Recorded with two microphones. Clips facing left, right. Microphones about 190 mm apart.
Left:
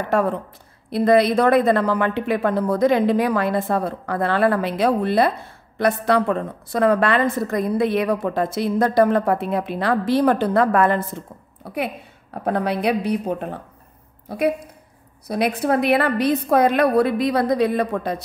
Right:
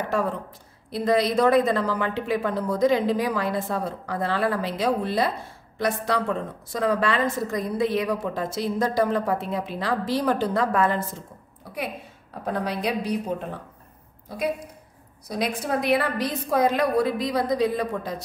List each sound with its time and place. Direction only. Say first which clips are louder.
0.8 s a woman's voice: left 6 dB; 60° left (ahead or behind)
11.6 s a sound: left 7 dB; 60° left (ahead or behind)
12.4 s a woman's voice: left 6 dB; 60° left (ahead or behind)
15.2 s a woman's voice: left 7 dB; 60° left (ahead or behind)